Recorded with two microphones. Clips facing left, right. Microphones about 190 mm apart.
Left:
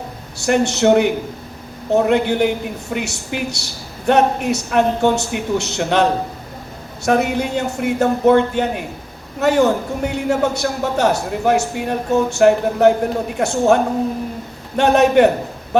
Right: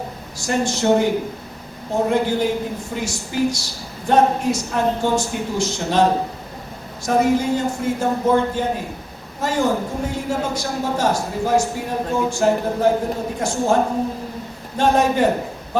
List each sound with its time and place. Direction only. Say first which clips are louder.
0.3 s a man's voice: left 5 dB; 70° left (ahead or behind)
14.8 s a man's voice: left 5 dB; 70° left (ahead or behind)